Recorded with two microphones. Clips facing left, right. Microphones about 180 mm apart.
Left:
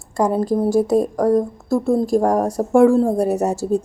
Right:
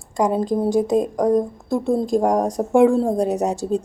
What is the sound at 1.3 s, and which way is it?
Speech, 5° left (ahead or behind).